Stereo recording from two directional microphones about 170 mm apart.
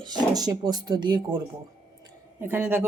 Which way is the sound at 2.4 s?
10° right (ahead or behind).